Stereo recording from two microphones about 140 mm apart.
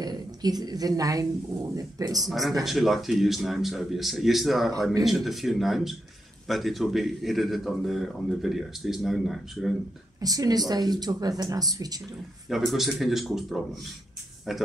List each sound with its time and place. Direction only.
0.0 s a woman's voice: 30° right (ahead or behind)
2.2 s speech: centre (ahead or behind)
10.2 s speech: 25° right (ahead or behind)
12.4 s speech: centre (ahead or behind)